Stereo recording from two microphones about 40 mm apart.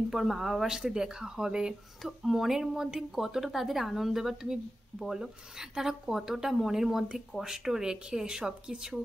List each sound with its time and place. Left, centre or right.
0.1 s speech: centre
0.7 s speech: centre
2.0 s speech: centre